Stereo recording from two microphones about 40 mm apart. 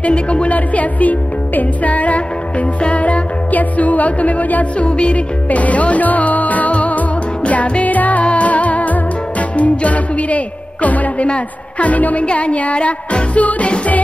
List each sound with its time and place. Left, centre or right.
0.0 s speech: left
7.9 s music: left
9.6 s speech: left